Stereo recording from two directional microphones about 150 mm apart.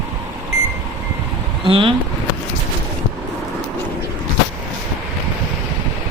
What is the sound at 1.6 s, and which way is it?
Speech, 35° right (ahead or behind).